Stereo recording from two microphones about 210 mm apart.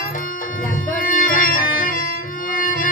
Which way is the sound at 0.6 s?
40° left (ahead or behind).